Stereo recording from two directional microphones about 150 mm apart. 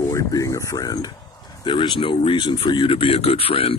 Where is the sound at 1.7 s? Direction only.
35° left (ahead or behind).